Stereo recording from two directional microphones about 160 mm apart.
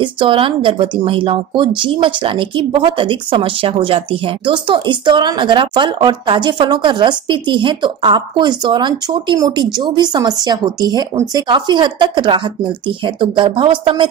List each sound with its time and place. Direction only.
0.0 s speech: 30° right (ahead or behind)